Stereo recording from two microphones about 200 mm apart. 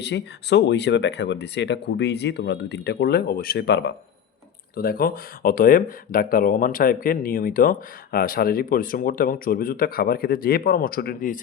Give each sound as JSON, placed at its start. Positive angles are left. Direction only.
{"t": 0.0, "sound": "speech", "side_deg": 60}